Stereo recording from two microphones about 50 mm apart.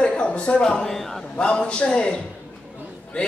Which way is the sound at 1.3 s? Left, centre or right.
Centre.